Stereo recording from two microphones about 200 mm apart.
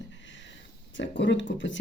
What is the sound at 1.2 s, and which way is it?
Speech, 65° left (ahead or behind).